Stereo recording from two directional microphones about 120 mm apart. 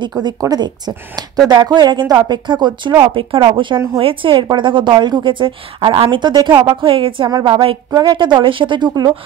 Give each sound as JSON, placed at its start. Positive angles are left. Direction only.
{"t": 0.2, "sound": "a woman's voice", "side_deg": -35}
{"t": 7.9, "sound": "speech", "side_deg": -35}